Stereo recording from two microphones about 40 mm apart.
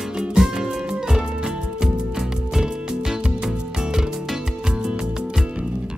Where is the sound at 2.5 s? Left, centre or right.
Centre.